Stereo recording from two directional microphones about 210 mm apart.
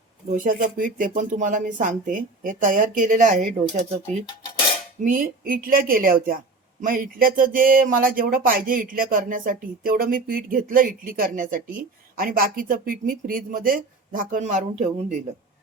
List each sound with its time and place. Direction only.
0.3 s speech: 40° right (ahead or behind)
5.0 s a woman's voice: 40° right (ahead or behind)